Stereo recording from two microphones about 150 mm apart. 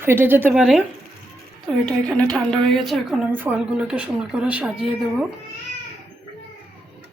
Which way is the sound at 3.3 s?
10° right (ahead or behind).